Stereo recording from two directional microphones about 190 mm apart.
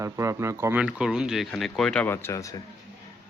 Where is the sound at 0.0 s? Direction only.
15° right (ahead or behind).